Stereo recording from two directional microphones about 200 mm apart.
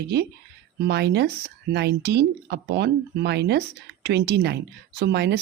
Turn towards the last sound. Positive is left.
turn(degrees=-55)  # may be behind; listen again after turning